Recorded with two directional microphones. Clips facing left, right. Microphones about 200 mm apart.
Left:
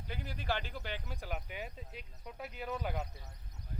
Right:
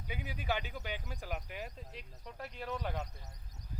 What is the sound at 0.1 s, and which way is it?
Speech, 5° right (ahead or behind).